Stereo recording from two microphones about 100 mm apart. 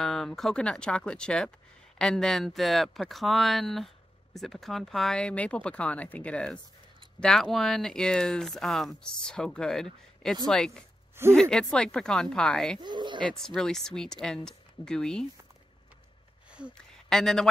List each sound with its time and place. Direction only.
0.0 s speech: 5° left (ahead or behind)
12.8 s speech: 50° right (ahead or behind)
13.2 s speech: 5° left (ahead or behind)
16.4 s a sound: 10° right (ahead or behind)
17.1 s speech: 5° left (ahead or behind)